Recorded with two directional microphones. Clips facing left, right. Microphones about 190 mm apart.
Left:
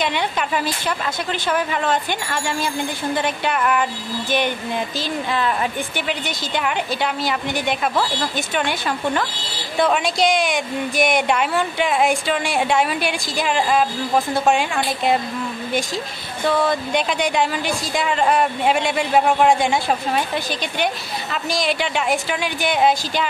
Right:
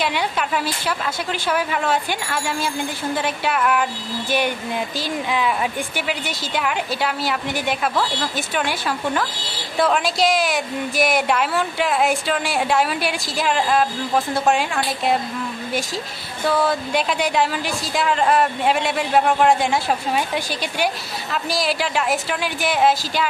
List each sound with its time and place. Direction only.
0.0 s a woman's voice: 5° right (ahead or behind)
16.4 s a woman's voice: 5° right (ahead or behind)